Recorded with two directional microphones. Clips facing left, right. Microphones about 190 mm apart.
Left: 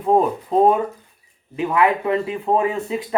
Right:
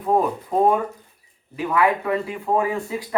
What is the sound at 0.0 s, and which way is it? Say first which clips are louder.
Speech: left 3 dB; 25° left (ahead or behind).